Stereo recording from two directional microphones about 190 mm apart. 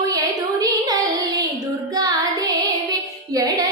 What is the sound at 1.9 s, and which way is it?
Music, 20° right (ahead or behind).